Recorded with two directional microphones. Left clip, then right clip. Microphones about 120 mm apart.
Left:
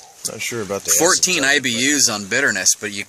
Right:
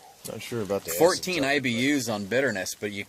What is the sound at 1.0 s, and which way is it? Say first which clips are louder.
Speech: left 6 dB; 25° right (ahead or behind).